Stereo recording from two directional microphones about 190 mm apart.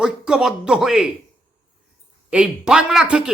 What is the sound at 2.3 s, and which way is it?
Speech, 5° right (ahead or behind).